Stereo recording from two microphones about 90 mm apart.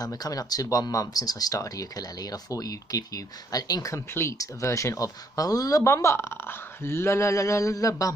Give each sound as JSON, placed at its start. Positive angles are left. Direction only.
{"t": 0.0, "sound": "speech", "side_deg": 45}
{"t": 4.1, "sound": "speech", "side_deg": 30}